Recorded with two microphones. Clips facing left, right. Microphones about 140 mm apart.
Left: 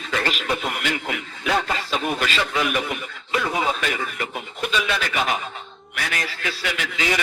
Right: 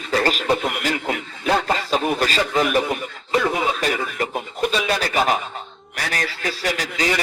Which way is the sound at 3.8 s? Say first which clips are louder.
Right 4 dB; 40° right (ahead or behind).